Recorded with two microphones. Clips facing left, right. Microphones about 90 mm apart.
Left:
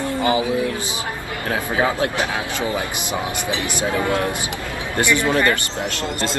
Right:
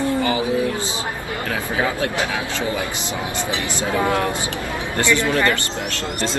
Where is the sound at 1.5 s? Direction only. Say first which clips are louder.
Left 3 dB; 25° left (ahead or behind).